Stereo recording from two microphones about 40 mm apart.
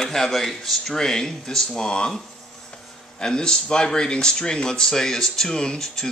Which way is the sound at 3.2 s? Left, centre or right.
Centre.